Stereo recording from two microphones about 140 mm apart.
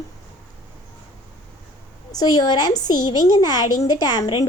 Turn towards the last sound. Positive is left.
turn(degrees=30)  # may be behind; listen again after turning